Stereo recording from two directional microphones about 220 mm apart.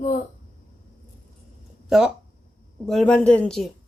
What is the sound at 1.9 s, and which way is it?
Speech, centre (ahead or behind).